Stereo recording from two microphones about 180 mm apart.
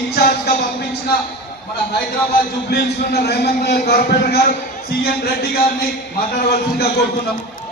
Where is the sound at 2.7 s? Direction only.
65° left (ahead or behind).